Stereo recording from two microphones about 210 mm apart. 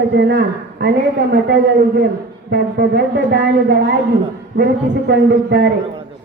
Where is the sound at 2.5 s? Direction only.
50° right (ahead or behind).